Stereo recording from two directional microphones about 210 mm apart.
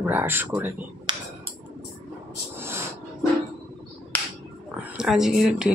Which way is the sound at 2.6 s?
10° right (ahead or behind).